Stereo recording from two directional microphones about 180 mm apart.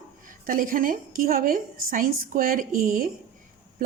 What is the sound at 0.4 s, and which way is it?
Speech, 50° right (ahead or behind).